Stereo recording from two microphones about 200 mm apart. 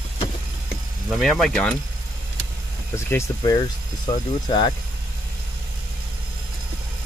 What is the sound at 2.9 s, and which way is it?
Speech, 15° left (ahead or behind).